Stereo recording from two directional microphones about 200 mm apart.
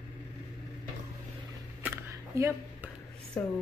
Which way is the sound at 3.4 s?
10° left (ahead or behind).